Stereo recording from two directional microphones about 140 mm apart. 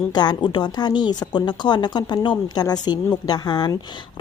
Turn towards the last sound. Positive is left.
turn(degrees=30)  # may be behind; listen again after turning